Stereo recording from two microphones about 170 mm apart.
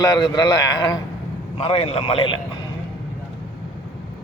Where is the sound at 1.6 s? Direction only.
35° left (ahead or behind).